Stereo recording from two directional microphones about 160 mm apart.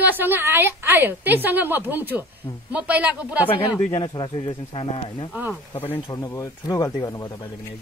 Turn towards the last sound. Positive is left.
turn(degrees=20)  # may be behind; listen again after turning